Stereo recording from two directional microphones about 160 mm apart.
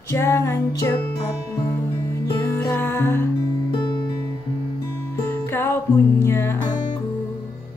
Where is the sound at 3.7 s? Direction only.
30° left (ahead or behind).